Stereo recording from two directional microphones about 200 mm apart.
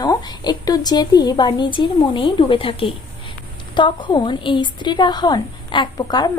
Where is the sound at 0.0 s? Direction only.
20° left (ahead or behind).